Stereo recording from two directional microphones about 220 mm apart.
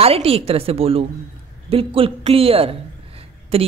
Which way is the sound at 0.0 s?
25° right (ahead or behind).